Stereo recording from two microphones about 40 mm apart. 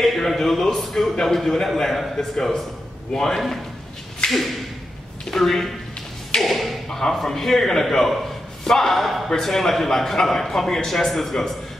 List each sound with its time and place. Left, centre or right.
0.0 s a man's voice: centre
4.2 s a sound: left
5.3 s a man's voice: centre
6.4 s thump: centre
6.9 s a man's voice: centre